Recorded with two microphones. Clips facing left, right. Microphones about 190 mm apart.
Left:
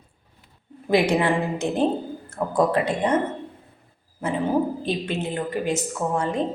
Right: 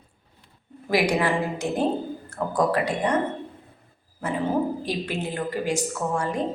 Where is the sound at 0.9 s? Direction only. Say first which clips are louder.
Left 2 dB; 25° left (ahead or behind).